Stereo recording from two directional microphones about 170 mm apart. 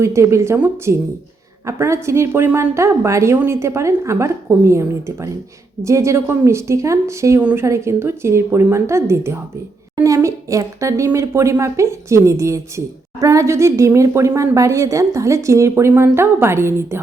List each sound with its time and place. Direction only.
0.0 s speech: 15° right (ahead or behind)